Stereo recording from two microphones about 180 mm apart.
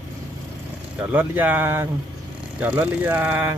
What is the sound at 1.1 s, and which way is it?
Speech, 10° right (ahead or behind).